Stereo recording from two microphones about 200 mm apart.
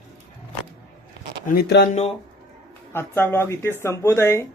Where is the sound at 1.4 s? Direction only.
55° left (ahead or behind).